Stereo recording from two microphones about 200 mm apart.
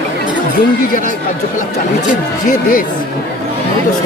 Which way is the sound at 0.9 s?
40° left (ahead or behind).